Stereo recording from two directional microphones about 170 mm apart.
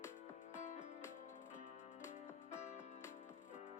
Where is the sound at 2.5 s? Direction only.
45° left (ahead or behind).